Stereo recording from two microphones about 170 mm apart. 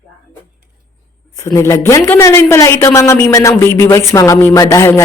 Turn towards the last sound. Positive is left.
turn(degrees=15)  # may be behind; listen again after turning